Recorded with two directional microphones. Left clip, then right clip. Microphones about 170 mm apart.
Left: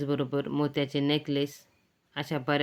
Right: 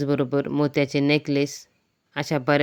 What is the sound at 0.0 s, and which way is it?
Speech, 40° right (ahead or behind).